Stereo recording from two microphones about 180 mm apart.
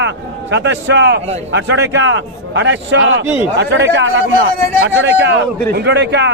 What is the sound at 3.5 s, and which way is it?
A man's voice, 75° right (ahead or behind).